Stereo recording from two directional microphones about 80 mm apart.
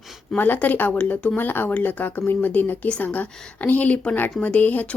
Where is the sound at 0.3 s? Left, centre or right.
Left.